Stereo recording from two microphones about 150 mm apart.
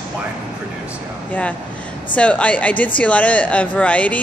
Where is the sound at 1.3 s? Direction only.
10° left (ahead or behind).